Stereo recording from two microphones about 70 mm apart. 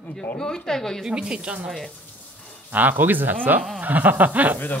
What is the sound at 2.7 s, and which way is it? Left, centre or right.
A woman's voice, right.